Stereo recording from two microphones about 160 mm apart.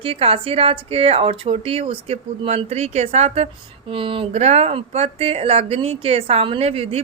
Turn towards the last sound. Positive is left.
turn(degrees=-40)  # may be behind; listen again after turning